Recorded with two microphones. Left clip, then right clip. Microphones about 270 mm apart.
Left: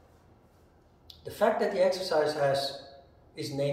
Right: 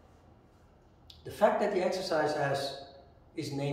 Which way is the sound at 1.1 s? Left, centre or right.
Centre.